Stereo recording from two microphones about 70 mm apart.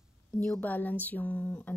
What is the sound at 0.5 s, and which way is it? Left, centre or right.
A woman's voice, left.